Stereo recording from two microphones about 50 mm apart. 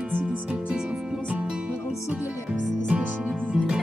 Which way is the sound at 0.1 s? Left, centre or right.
Right.